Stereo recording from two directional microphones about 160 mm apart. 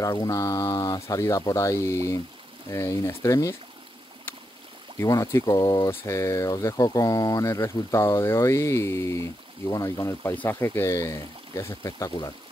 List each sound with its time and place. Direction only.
0.0 s speech: 20° left (ahead or behind)
4.9 s speech: 20° left (ahead or behind)